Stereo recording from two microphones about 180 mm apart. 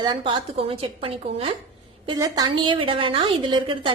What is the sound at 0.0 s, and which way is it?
A woman's voice, 25° right (ahead or behind).